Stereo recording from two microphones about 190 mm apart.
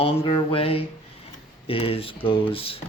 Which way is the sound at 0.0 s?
30° left (ahead or behind).